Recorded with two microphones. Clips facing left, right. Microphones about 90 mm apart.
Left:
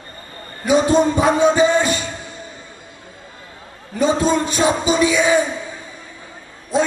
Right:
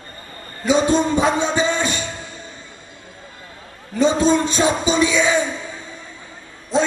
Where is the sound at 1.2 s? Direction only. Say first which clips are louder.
Left 4 dB; 25° right (ahead or behind).